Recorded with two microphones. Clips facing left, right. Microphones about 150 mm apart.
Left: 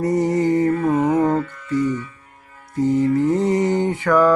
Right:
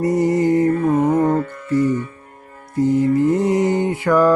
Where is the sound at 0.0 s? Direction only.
10° right (ahead or behind).